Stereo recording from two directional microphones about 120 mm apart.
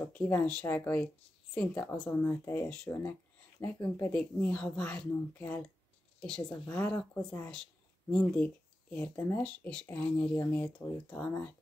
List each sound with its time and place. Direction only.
0.0 s speech: 10° left (ahead or behind)
2.9 s speech: 25° left (ahead or behind)
4.1 s speech: 10° left (ahead or behind)